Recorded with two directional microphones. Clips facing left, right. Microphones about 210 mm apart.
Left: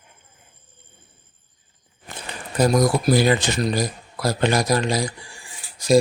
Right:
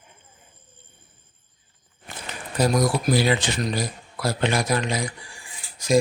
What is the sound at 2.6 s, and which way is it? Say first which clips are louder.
Speech: left 3 dB; 45° left (ahead or behind).